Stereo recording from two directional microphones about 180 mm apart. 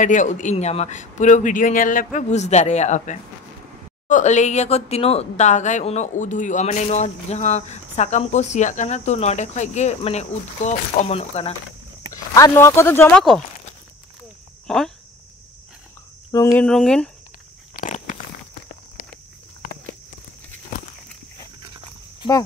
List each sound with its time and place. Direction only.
0.0 s a man's voice: 45° left (ahead or behind)
12.1 s speech: 15° left (ahead or behind)
14.7 s speech: centre (ahead or behind)
16.3 s speech: 15° left (ahead or behind)
16.6 s speech: 5° left (ahead or behind)
17.7 s a sound: 45° left (ahead or behind)